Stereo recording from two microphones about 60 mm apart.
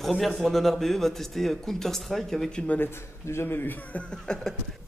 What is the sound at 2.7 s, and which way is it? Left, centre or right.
A man's voice, left.